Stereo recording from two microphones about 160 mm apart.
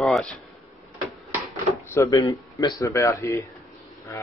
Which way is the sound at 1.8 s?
15° left (ahead or behind).